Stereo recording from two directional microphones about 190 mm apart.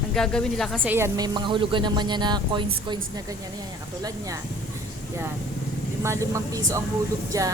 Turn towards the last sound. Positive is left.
turn(degrees=-15)  # may be behind; listen again after turning